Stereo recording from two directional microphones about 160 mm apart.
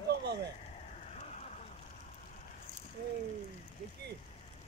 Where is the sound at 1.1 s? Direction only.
45° left (ahead or behind).